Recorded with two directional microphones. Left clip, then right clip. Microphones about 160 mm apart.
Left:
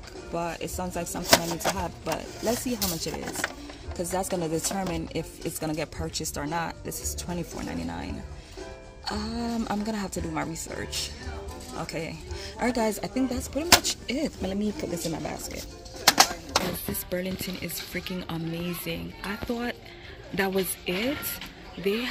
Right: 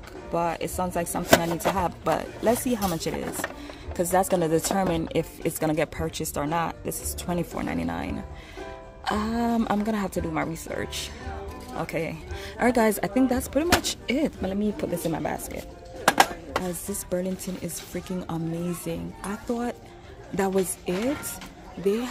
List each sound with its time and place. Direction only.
0.3 s chopping: 10° right (ahead or behind)
3.4 s speech: 20° right (ahead or behind)
6.3 s chopping: 10° right (ahead or behind)
13.8 s speech: 20° right (ahead or behind)
14.4 s chopping: 5° right (ahead or behind)
16.1 s bird: 5° right (ahead or behind)
17.1 s chopping: 10° right (ahead or behind)
19.5 s speech: 5° right (ahead or behind)
20.3 s chopping: 5° right (ahead or behind)